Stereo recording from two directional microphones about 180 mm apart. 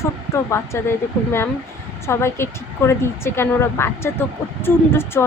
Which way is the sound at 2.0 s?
15° left (ahead or behind).